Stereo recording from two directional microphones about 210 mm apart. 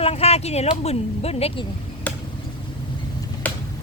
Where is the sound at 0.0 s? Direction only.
30° left (ahead or behind).